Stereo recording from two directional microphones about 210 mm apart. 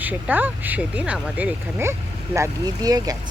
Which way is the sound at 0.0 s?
10° right (ahead or behind).